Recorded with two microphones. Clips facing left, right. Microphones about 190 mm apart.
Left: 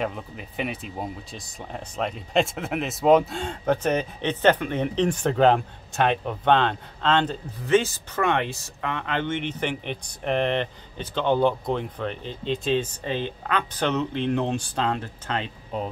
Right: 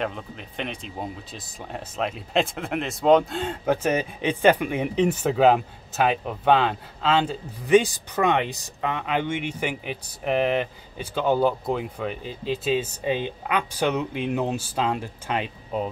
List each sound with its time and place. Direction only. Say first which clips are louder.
0.0 s speech: even; 5° left (ahead or behind)